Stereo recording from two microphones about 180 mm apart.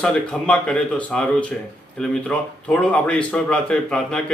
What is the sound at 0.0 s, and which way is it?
A man's voice, 5° left (ahead or behind).